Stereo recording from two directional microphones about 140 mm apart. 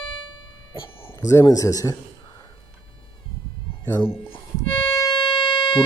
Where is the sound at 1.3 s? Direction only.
25° left (ahead or behind).